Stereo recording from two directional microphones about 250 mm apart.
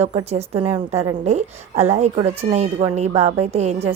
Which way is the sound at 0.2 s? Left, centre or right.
Right.